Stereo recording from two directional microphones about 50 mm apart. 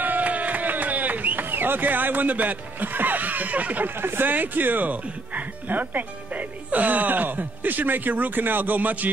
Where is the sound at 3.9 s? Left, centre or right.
Right.